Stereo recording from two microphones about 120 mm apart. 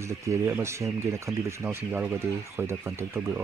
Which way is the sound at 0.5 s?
20° right (ahead or behind).